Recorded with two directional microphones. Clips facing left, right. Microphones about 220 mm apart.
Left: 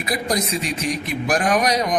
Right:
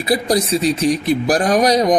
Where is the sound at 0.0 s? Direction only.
30° right (ahead or behind).